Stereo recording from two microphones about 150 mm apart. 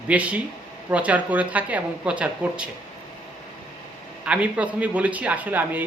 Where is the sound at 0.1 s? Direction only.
10° right (ahead or behind).